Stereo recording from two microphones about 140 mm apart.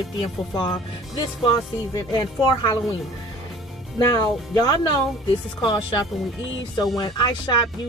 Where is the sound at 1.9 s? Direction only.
25° left (ahead or behind).